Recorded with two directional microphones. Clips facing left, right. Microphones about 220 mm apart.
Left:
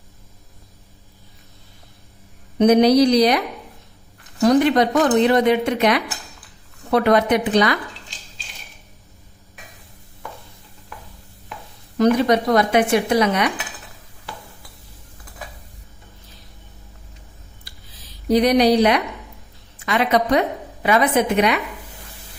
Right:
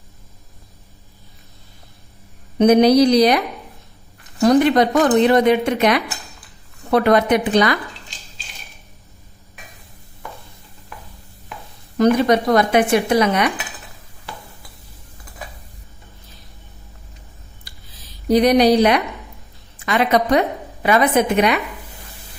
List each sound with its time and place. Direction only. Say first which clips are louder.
2.6 s speech: right 1 dB; 50° right (ahead or behind)
4.4 s speech: right 2 dB; 45° right (ahead or behind)
11.9 s speech: right 1 dB; 50° right (ahead or behind)
18.3 s speech: right 2 dB; 45° right (ahead or behind)